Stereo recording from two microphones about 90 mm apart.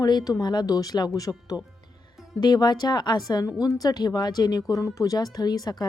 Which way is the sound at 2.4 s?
50° left (ahead or behind).